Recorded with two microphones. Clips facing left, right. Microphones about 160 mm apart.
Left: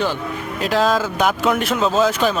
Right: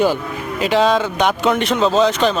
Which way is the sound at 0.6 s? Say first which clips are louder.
Right 3 dB; centre (ahead or behind).